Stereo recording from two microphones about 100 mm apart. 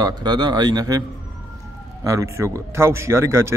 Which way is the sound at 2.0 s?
30° right (ahead or behind).